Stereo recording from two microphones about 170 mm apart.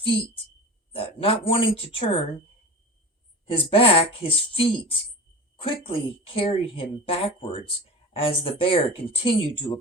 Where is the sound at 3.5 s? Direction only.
35° left (ahead or behind).